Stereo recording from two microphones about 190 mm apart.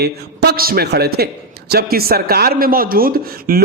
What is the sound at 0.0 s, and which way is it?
Speech, 60° right (ahead or behind).